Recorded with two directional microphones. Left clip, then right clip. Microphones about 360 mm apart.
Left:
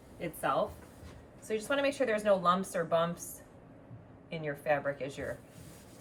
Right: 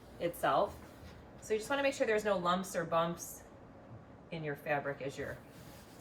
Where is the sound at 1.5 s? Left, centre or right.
Centre.